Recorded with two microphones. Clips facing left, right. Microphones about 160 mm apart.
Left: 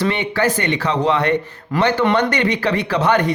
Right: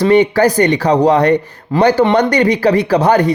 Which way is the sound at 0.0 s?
40° right (ahead or behind).